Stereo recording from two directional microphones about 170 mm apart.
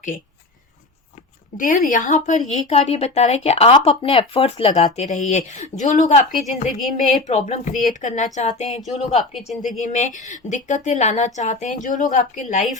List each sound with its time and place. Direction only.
1.5 s speech: 50° left (ahead or behind); by 4.9 s 35° left (ahead or behind)
4.9 s a woman's voice: 45° left (ahead or behind)